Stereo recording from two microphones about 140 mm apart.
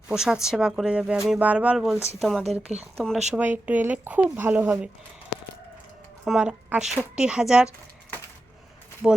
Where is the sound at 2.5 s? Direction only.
50° right (ahead or behind).